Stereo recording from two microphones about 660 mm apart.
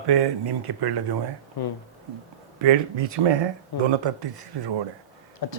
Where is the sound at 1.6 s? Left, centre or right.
Left.